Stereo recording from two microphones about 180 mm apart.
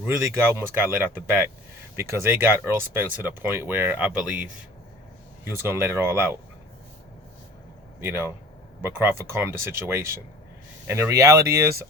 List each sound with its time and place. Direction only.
0.0 s speech: 10° right (ahead or behind)
5.5 s speech: 15° right (ahead or behind)
8.0 s speech: 15° right (ahead or behind)